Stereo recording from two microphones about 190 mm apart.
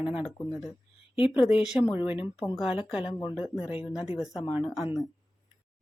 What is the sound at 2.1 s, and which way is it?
Speech, 25° left (ahead or behind).